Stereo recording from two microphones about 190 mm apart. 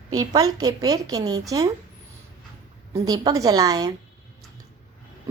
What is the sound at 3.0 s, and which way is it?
Speech, 20° right (ahead or behind).